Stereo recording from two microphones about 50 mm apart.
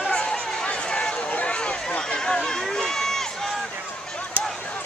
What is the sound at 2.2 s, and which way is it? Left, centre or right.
Speech, centre.